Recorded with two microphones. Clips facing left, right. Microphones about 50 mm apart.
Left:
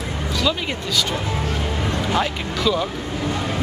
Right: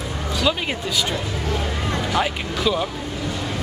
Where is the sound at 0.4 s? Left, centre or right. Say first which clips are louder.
Right 1 dB; centre.